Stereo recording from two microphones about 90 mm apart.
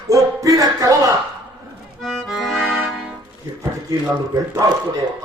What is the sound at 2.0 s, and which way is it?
Accordion, centre (ahead or behind).